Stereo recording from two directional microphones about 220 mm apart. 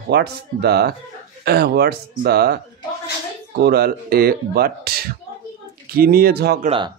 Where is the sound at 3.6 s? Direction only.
45° right (ahead or behind).